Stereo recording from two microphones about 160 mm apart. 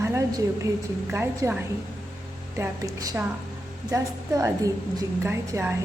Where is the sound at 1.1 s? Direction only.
15° right (ahead or behind).